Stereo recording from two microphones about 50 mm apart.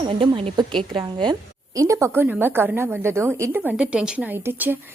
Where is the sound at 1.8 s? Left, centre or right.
Right.